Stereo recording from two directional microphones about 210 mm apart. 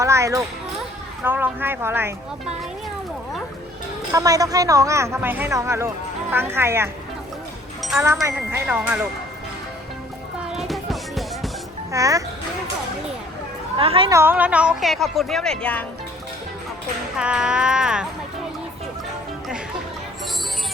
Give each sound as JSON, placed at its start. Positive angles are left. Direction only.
{"t": 0.0, "sound": "children playing", "side_deg": -15}
{"t": 1.2, "sound": "speech", "side_deg": -10}
{"t": 4.1, "sound": "speech", "side_deg": -15}
{"t": 7.8, "sound": "music", "side_deg": 0}
{"t": 8.0, "sound": "speech", "side_deg": -10}
{"t": 10.5, "sound": "music", "side_deg": 0}
{"t": 11.9, "sound": "speech", "side_deg": -15}
{"t": 13.7, "sound": "a woman's voice", "side_deg": -25}
{"t": 14.1, "sound": "speech", "side_deg": -10}
{"t": 17.2, "sound": "speech", "side_deg": -5}